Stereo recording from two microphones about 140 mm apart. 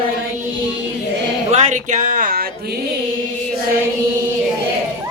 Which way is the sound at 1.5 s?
55° right (ahead or behind).